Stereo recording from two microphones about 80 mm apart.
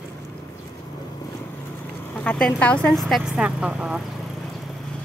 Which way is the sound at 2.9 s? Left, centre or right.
Centre.